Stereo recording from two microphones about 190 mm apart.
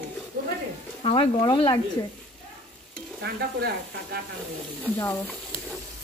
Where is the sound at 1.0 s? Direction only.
30° left (ahead or behind).